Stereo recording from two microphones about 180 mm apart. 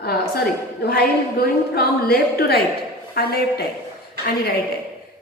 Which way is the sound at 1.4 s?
60° left (ahead or behind).